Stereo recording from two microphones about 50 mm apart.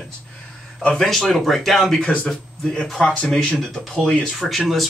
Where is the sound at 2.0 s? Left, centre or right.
Left.